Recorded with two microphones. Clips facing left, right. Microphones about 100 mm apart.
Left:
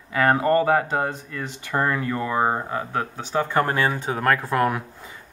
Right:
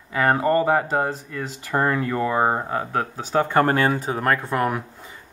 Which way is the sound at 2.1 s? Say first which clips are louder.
Right 2 dB; 10° right (ahead or behind).